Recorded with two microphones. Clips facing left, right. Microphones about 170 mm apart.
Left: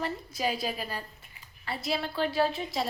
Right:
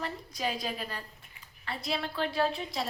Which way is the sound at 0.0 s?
5° left (ahead or behind).